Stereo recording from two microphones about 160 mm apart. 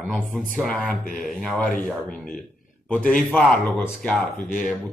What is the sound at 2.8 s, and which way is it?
Speech, 10° left (ahead or behind).